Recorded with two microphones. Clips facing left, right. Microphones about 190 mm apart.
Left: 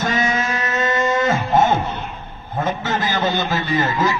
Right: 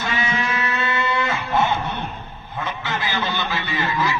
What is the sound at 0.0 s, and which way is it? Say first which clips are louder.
Music: left 4 dB; 40° left (ahead or behind).